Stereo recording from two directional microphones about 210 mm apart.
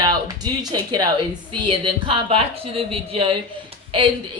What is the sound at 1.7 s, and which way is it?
Speech, 25° right (ahead or behind).